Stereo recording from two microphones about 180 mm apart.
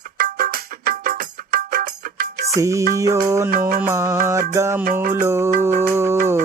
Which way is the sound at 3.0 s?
15° right (ahead or behind).